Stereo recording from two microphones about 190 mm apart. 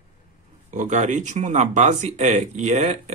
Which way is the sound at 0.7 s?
40° right (ahead or behind).